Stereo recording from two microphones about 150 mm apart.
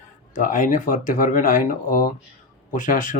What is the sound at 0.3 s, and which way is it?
Speech, 60° left (ahead or behind).